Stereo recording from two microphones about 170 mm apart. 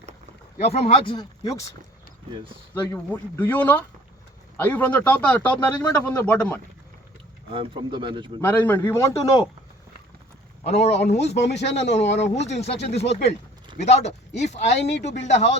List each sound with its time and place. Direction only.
0.6 s speech: 35° left (ahead or behind); by 1.7 s 20° left (ahead or behind)
2.9 s speech: 10° left (ahead or behind)
7.5 s speech: 30° right (ahead or behind)
8.4 s speech: 10° left (ahead or behind)
10.6 s speech: 40° left (ahead or behind)
11.3 s speech: 90° left
12.5 s speech: 40° left (ahead or behind)